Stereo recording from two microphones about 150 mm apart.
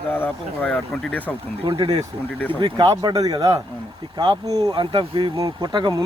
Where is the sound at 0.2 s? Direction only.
10° left (ahead or behind).